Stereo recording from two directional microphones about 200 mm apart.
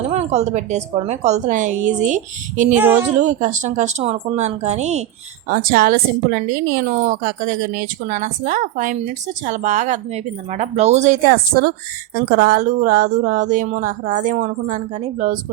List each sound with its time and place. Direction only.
0.1 s speech: 35° right (ahead or behind)
2.7 s speech: 10° right (ahead or behind)
3.2 s speech: 40° right (ahead or behind)
5.5 s a woman's voice: 45° right (ahead or behind)